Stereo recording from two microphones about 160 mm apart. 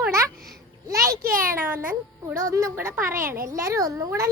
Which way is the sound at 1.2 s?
60° right (ahead or behind).